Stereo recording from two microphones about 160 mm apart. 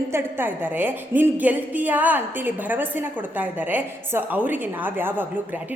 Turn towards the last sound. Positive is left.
turn(degrees=-10)  # may be behind; listen again after turning